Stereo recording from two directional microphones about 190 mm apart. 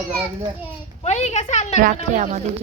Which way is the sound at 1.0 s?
35° left (ahead or behind).